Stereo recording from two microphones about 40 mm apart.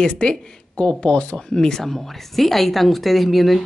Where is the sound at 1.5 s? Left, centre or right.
Centre.